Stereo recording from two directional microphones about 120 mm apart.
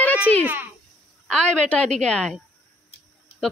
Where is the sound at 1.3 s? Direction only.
10° left (ahead or behind).